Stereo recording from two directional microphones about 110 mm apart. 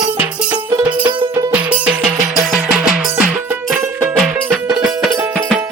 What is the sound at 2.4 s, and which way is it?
Music, centre (ahead or behind).